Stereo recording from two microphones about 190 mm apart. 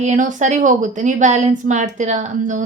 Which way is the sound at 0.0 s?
40° right (ahead or behind).